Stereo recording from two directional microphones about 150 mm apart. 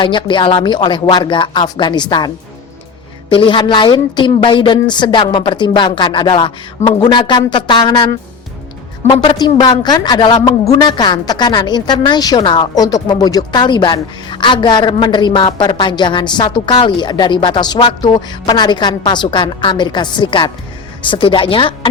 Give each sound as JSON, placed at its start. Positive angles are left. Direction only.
{"t": 0.0, "sound": "speech", "side_deg": 35}
{"t": 9.1, "sound": "speech", "side_deg": 35}